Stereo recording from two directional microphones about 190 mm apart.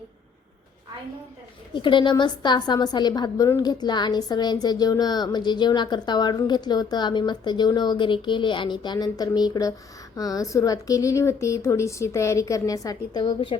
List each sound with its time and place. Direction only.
1.7 s a woman's voice: 25° left (ahead or behind)